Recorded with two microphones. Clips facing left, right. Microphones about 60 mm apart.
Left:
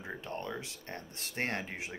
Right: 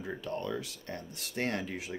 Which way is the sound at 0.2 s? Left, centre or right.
Left.